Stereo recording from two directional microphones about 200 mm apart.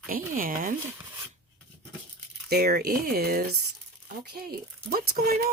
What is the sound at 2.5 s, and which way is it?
Speech, 50° right (ahead or behind).